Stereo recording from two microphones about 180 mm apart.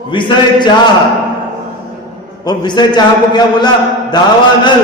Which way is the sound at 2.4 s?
25° left (ahead or behind).